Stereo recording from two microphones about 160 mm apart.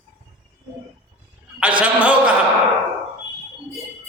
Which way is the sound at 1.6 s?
10° right (ahead or behind).